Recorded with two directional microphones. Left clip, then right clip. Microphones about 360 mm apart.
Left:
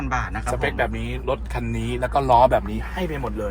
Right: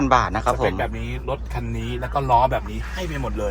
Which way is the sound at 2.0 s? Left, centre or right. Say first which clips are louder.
Left 2 dB; left.